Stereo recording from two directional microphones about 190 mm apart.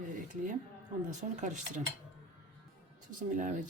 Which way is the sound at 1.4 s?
40° right (ahead or behind).